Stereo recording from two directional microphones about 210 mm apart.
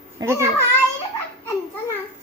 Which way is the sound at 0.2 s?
15° right (ahead or behind).